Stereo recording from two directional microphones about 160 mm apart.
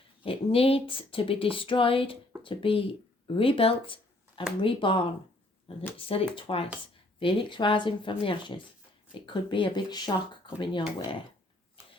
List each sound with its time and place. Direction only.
0.2 s speech: 35° left (ahead or behind)